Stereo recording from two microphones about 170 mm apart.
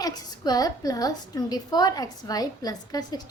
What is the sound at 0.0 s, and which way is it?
A woman's voice, 25° left (ahead or behind).